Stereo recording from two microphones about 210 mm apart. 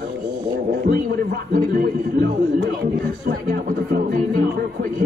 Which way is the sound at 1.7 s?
45° right (ahead or behind).